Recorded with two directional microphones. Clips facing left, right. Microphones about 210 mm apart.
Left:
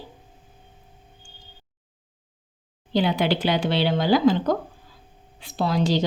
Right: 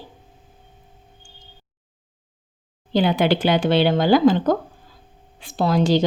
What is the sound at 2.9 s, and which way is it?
A woman's voice, 50° right (ahead or behind).